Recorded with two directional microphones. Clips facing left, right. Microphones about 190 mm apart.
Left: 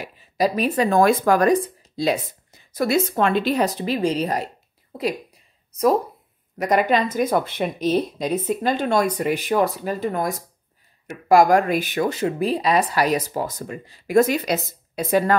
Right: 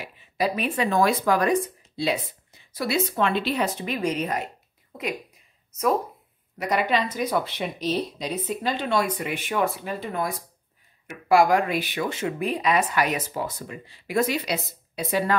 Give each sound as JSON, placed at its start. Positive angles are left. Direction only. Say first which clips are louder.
{"t": 0.0, "sound": "speech", "louder": "left 4 dB", "side_deg": 40}
{"t": 6.6, "sound": "speech", "louder": "left 5 dB", "side_deg": 45}